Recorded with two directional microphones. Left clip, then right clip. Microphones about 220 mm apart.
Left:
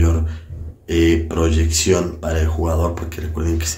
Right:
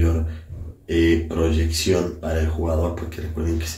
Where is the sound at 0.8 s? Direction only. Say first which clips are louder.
Left 3 dB; 15° left (ahead or behind).